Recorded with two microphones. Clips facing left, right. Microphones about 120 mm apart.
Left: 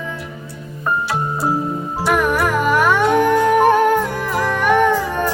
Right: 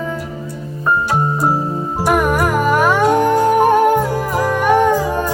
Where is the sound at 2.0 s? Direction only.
45° right (ahead or behind).